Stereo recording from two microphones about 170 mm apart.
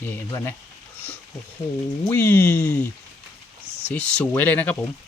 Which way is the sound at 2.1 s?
10° left (ahead or behind).